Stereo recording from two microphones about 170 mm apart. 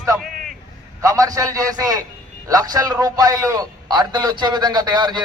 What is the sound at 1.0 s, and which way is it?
A man's voice, 20° right (ahead or behind).